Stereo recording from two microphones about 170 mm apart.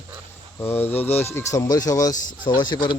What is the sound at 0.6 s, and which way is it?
Speech, 15° left (ahead or behind).